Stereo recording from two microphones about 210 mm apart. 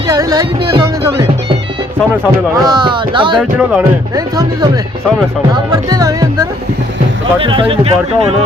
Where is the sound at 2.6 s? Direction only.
20° right (ahead or behind).